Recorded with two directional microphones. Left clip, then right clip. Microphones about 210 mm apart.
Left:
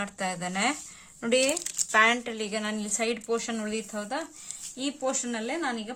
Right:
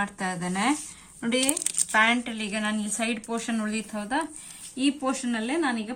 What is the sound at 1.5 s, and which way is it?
Speech, 25° left (ahead or behind).